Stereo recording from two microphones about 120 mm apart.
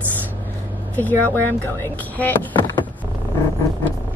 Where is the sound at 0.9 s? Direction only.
15° left (ahead or behind).